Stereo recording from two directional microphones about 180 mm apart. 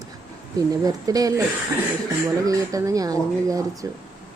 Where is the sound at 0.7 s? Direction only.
20° right (ahead or behind).